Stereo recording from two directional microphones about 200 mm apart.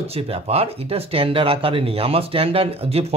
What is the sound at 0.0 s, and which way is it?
Speech, 30° right (ahead or behind).